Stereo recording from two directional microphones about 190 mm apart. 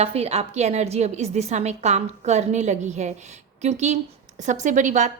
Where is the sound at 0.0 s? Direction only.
30° right (ahead or behind).